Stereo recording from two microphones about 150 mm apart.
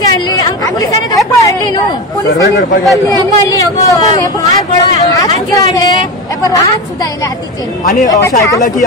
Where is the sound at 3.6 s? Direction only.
25° left (ahead or behind).